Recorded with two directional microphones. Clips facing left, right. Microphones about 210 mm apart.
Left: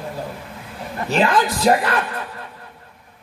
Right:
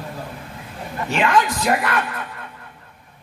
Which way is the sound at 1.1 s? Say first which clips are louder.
Left 1 dB; 35° left (ahead or behind).